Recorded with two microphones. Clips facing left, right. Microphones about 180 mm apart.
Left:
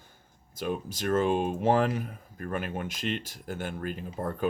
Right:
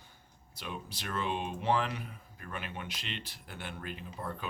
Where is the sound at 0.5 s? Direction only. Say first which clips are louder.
Left 10 dB; 45° left (ahead or behind).